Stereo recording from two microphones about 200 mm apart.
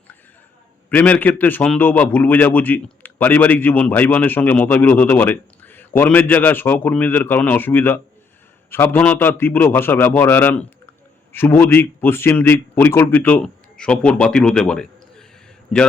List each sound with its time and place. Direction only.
0.9 s a man's voice: 5° left (ahead or behind)